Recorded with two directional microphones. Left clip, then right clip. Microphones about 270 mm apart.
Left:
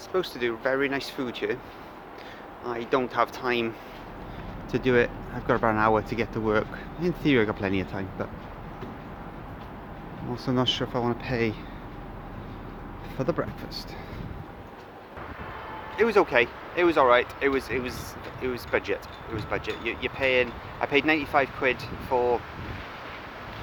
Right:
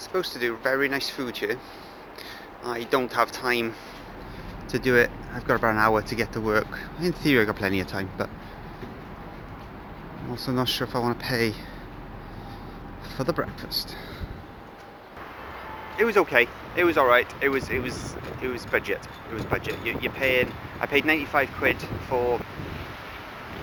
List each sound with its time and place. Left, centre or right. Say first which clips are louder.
0.3 s speech: right 3 dB; left
2.9 s speech: right 1 dB; left
4.7 s speech: right 2 dB; left
10.5 s speech: even; left
13.1 s speech: right 1 dB; centre
16.0 s speech: right 1 dB; centre